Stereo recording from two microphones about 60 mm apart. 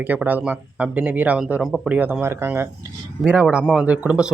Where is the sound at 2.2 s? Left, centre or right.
Right.